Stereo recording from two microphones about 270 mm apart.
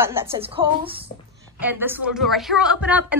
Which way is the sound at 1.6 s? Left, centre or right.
Centre.